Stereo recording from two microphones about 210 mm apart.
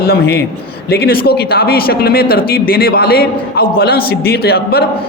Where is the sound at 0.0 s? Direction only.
50° left (ahead or behind).